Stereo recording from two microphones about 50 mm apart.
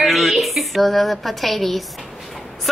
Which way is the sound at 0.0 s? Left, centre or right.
Centre.